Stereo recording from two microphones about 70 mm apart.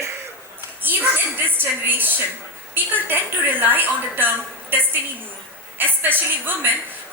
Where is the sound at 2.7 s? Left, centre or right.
Right.